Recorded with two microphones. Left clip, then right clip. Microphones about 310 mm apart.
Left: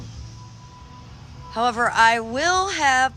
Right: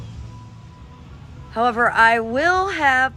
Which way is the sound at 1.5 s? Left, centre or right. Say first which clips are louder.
Right 3 dB; centre.